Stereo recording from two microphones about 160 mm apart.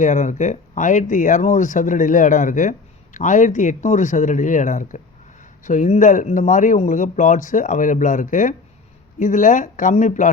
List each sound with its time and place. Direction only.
0.0 s speech: 50° left (ahead or behind)